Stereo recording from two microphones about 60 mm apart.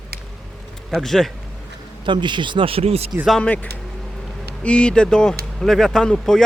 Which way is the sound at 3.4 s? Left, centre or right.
Left.